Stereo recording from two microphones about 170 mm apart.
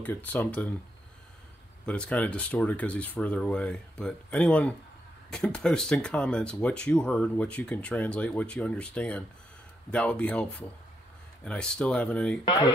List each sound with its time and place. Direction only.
0.0 s speech: 10° left (ahead or behind)
1.9 s speech: 5° left (ahead or behind)
12.4 s speech: 25° left (ahead or behind)